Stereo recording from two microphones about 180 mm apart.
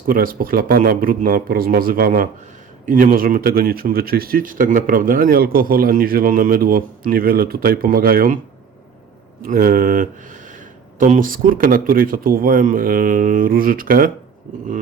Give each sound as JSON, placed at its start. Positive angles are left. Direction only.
{"t": 0.1, "sound": "speech", "side_deg": -55}
{"t": 9.4, "sound": "speech", "side_deg": -55}